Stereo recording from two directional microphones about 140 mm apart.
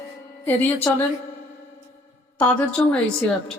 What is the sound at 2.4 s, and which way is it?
Speech, 5° left (ahead or behind).